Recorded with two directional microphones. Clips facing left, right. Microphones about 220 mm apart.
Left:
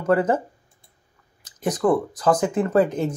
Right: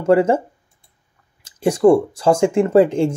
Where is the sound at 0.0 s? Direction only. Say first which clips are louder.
Right 5 dB; 25° right (ahead or behind).